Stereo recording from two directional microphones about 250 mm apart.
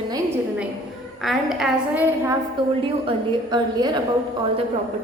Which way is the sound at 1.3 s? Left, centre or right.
Centre.